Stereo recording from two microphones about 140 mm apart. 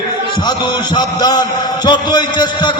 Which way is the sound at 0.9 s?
30° left (ahead or behind).